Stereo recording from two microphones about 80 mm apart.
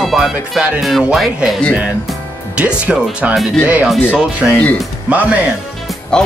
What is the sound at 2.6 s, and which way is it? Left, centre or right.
Speech, centre.